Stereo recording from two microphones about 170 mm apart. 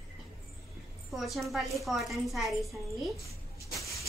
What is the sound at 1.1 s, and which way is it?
A woman's voice, centre (ahead or behind).